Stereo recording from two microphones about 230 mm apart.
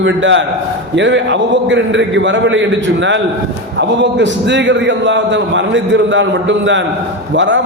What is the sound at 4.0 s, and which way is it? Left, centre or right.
A man's voice, right.